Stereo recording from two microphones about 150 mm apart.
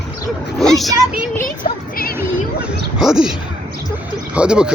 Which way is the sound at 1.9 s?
80° left.